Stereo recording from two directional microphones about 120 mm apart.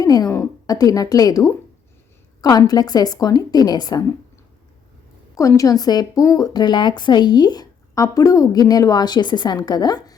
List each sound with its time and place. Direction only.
0.0 s a woman's voice: 30° left (ahead or behind)
5.4 s speech: 25° left (ahead or behind)